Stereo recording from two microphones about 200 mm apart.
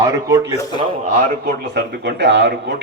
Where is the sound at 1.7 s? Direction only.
55° right (ahead or behind).